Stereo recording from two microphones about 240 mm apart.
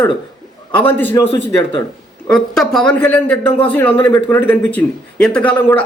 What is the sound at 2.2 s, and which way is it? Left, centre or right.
Speech, centre.